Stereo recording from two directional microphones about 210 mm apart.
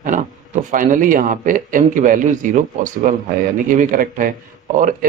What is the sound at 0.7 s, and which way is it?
Speech, 40° right (ahead or behind).